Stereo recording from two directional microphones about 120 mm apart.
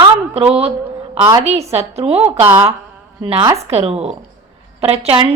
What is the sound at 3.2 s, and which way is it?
Speech, 45° right (ahead or behind).